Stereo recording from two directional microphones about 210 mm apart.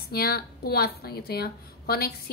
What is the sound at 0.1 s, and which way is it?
Speech, 50° left (ahead or behind).